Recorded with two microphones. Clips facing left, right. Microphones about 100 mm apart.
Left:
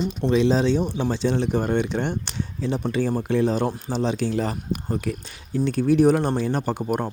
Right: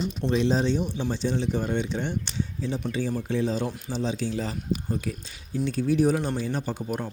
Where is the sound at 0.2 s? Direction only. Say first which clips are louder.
Left 5 dB; 90° left.